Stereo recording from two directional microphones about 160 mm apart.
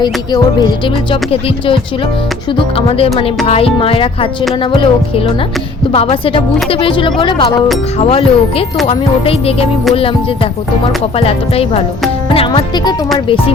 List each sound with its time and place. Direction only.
0.0 s speech: 25° left (ahead or behind)